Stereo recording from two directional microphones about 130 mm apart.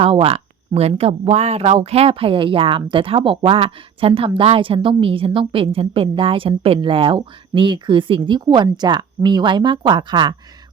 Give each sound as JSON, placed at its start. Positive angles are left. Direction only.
{"t": 0.0, "sound": "speech", "side_deg": -45}